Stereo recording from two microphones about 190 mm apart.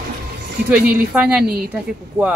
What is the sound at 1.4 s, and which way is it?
Speech, 55° right (ahead or behind).